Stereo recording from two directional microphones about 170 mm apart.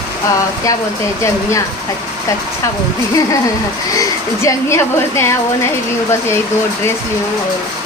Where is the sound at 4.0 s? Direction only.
20° left (ahead or behind).